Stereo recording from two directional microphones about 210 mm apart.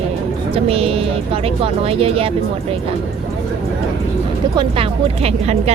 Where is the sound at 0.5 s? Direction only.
30° right (ahead or behind).